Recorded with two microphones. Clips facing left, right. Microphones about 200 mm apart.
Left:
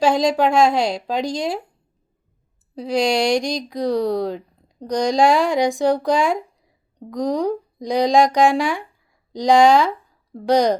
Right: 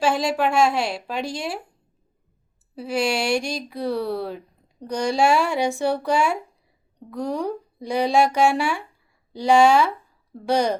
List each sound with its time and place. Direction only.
0.2 s a woman's voice: 90° left
2.8 s speech: 15° left (ahead or behind)